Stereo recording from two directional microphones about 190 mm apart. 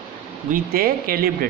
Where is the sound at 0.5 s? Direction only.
50° right (ahead or behind).